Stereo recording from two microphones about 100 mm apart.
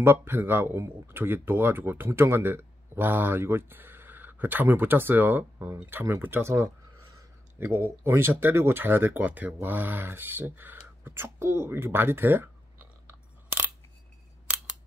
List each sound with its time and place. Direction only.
0.0 s speech: 20° right (ahead or behind)